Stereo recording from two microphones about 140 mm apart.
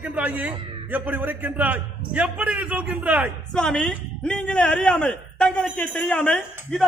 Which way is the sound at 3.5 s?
5° left (ahead or behind).